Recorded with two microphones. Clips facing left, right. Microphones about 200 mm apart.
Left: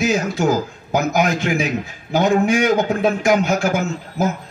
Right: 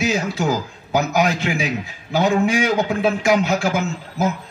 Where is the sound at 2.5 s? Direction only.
35° right (ahead or behind).